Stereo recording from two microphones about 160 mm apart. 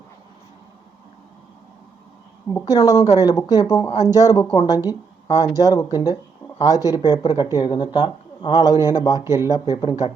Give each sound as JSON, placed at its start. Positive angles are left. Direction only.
{"t": 2.6, "sound": "speech", "side_deg": 25}
{"t": 4.9, "sound": "a sound", "side_deg": 25}
{"t": 5.5, "sound": "speech", "side_deg": 20}
{"t": 9.2, "sound": "speech", "side_deg": -15}
{"t": 9.5, "sound": "speech", "side_deg": 25}